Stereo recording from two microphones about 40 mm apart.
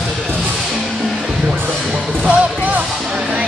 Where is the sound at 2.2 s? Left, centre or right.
Right.